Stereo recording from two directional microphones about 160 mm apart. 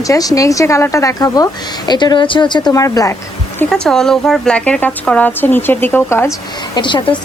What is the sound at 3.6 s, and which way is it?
A woman's voice, 5° left (ahead or behind).